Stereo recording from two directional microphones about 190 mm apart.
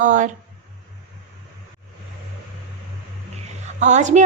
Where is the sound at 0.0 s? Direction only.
40° right (ahead or behind).